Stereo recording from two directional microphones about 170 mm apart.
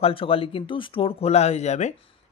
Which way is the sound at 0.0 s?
35° left (ahead or behind).